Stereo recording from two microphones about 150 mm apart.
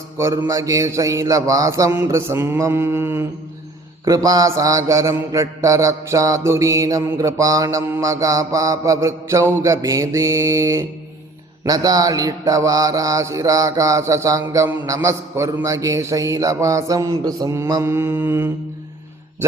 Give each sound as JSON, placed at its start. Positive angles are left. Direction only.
{"t": 0.2, "sound": "mantra", "side_deg": -20}